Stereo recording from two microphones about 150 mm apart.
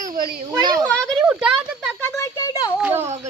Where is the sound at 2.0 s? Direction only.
20° left (ahead or behind).